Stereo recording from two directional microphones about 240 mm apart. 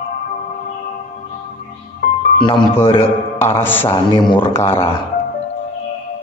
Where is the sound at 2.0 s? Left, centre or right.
Left.